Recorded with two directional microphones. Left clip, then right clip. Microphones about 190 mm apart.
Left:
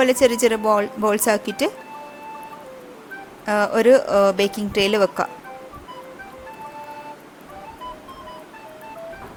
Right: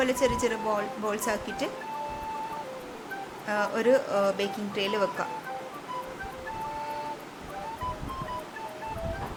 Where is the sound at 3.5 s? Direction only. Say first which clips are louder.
Left 9 dB; 40° left (ahead or behind).